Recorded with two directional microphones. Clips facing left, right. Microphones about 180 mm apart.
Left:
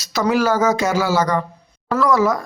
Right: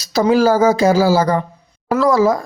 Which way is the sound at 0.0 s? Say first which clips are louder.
Right 5 dB; 30° right (ahead or behind).